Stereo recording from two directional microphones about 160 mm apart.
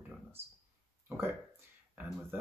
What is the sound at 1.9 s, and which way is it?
Speech, 10° right (ahead or behind).